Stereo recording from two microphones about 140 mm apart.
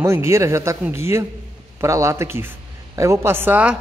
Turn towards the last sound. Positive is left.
turn(degrees=-10)  # may be behind; listen again after turning